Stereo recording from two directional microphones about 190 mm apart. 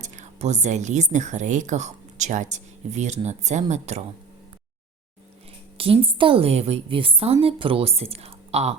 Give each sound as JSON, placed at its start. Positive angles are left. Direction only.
{"t": 0.0, "sound": "a woman's voice", "side_deg": -35}
{"t": 5.7, "sound": "a woman's voice", "side_deg": -30}